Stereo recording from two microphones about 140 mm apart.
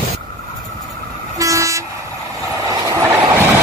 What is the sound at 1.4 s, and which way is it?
Train, 20° right (ahead or behind).